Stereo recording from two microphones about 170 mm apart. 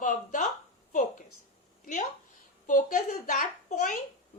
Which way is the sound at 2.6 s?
50° left (ahead or behind).